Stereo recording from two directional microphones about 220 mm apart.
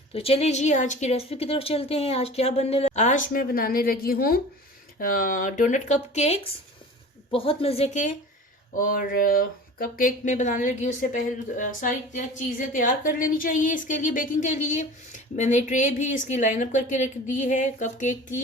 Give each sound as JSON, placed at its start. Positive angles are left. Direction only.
{"t": 0.1, "sound": "a woman's voice", "side_deg": 25}